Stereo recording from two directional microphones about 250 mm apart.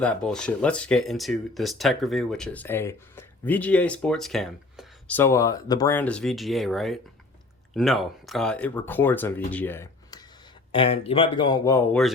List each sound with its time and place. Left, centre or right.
0.0 s speech: centre